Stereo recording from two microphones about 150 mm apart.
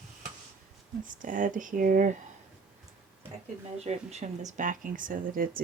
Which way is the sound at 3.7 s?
45° right (ahead or behind).